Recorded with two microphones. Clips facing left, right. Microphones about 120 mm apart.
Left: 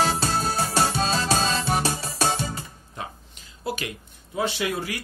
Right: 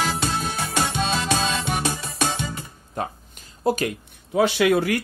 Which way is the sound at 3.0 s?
50° right (ahead or behind).